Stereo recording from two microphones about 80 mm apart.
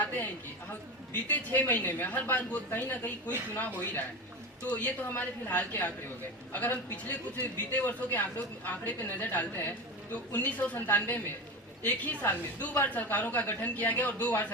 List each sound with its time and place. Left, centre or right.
0.7 s a man's voice: left